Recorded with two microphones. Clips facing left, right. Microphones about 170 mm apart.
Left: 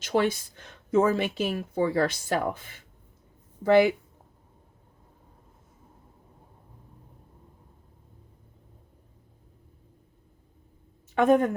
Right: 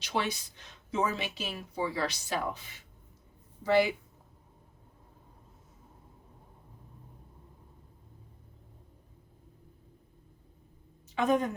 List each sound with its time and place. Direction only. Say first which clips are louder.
0.0 s speech: left 8 dB; 50° left (ahead or behind)
11.1 s a woman's voice: left 7 dB; 55° left (ahead or behind)